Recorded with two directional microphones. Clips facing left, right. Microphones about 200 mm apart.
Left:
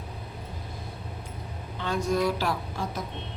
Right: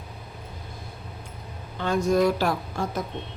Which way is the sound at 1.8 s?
45° right (ahead or behind).